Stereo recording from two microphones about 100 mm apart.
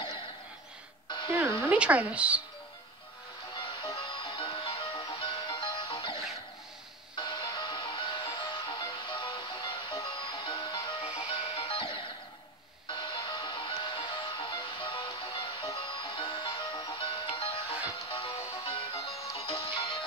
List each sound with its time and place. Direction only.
1.6 s speech: 15° right (ahead or behind)
3.5 s music: 55° left (ahead or behind)
7.2 s music: 50° left (ahead or behind)
11.0 s music: 65° left (ahead or behind)